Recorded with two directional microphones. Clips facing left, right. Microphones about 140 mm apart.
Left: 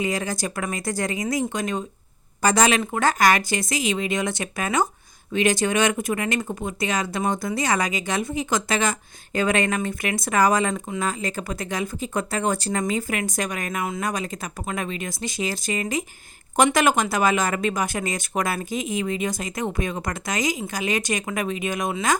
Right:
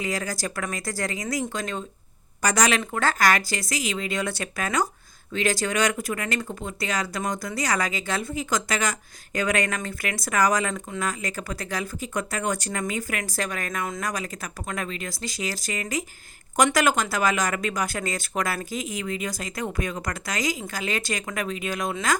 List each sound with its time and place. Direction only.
0.0 s speech: 20° left (ahead or behind)